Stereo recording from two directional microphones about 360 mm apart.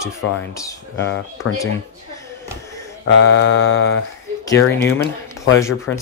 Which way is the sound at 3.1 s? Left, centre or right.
Left.